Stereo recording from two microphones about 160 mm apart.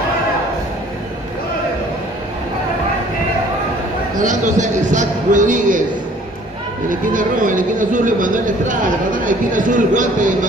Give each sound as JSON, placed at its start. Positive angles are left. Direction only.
{"t": 4.2, "sound": "a man's voice", "side_deg": -50}
{"t": 6.9, "sound": "speech", "side_deg": -55}